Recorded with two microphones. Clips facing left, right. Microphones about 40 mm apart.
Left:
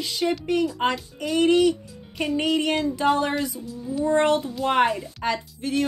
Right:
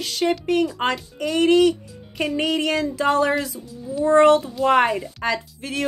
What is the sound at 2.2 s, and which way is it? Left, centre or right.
Music, right.